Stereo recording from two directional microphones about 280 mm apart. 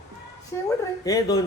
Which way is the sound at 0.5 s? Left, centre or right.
Centre.